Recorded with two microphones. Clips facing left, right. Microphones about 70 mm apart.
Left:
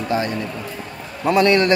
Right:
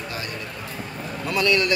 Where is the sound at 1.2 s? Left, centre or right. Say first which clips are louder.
Left 7 dB; left.